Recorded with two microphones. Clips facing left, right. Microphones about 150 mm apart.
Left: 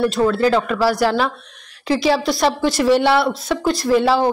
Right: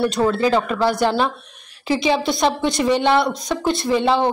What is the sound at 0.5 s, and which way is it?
Speech, centre (ahead or behind).